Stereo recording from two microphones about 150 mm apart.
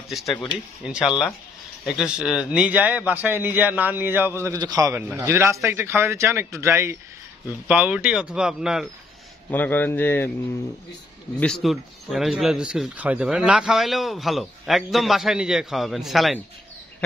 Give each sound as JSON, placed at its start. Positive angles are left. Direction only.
{"t": 0.8, "sound": "a man's voice", "side_deg": -5}
{"t": 9.5, "sound": "a man's voice", "side_deg": 10}
{"t": 11.3, "sound": "speech", "side_deg": 5}